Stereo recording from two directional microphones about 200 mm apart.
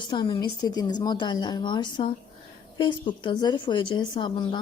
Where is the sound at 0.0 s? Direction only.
20° left (ahead or behind).